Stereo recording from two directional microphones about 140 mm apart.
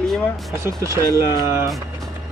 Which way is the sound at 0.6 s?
20° right (ahead or behind).